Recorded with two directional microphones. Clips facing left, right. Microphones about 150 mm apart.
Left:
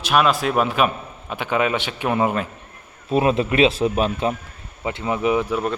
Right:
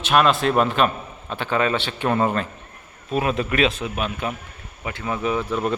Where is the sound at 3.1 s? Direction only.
30° left (ahead or behind).